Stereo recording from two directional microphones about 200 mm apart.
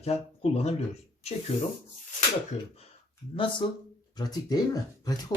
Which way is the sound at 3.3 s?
25° left (ahead or behind).